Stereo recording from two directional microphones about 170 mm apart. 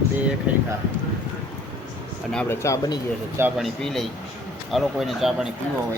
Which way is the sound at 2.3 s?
10° left (ahead or behind).